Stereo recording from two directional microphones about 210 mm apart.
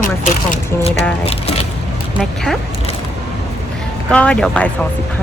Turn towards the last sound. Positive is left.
turn(degrees=5)  # may be behind; listen again after turning